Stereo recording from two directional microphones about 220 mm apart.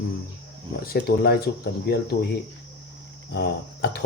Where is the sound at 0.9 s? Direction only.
45° left (ahead or behind).